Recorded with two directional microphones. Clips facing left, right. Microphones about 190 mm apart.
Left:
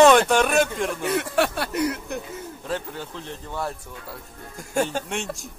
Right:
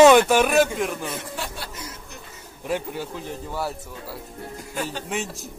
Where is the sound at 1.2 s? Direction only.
70° left (ahead or behind).